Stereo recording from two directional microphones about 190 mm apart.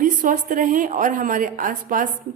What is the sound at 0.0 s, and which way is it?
A woman's voice, 45° right (ahead or behind).